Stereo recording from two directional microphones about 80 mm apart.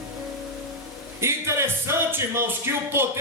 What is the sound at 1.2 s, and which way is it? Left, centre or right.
Speech, right.